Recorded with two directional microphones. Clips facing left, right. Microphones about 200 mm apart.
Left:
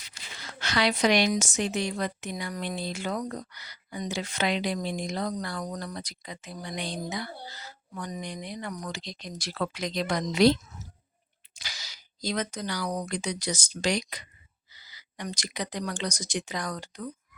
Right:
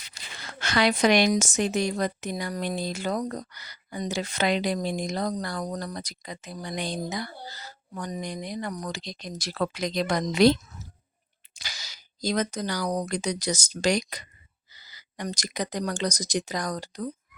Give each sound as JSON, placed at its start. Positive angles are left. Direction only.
{"t": 0.3, "sound": "a woman's voice", "side_deg": -55}
{"t": 11.6, "sound": "speech", "side_deg": -45}